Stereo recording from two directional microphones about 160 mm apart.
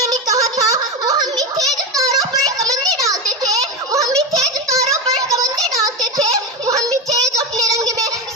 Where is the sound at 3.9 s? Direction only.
20° right (ahead or behind).